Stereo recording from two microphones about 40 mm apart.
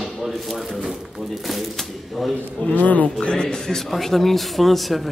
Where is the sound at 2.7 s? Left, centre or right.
Left.